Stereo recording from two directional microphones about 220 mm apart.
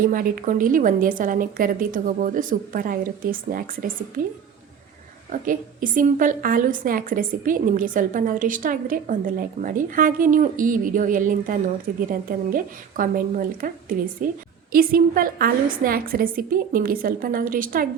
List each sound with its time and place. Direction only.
0.0 s a woman's voice: 40° right (ahead or behind)
5.3 s a woman's voice: 40° right (ahead or behind)